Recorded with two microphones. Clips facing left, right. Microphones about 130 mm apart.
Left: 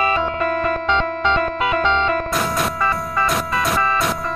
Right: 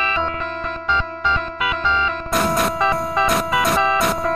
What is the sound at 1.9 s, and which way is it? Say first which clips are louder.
Music: left 1 dB; 60° left (ahead or behind).